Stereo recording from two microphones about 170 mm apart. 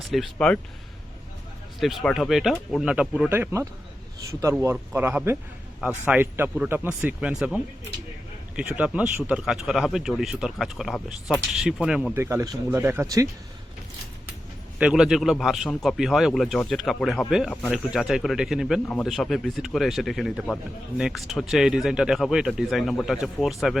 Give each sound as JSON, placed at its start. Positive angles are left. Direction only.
{"t": 0.1, "sound": "speech", "side_deg": 5}
{"t": 1.8, "sound": "speech", "side_deg": 0}
{"t": 12.2, "sound": "speech", "side_deg": -15}
{"t": 14.8, "sound": "speech", "side_deg": -5}